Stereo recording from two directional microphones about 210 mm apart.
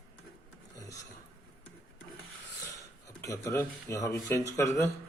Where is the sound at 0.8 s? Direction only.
15° left (ahead or behind).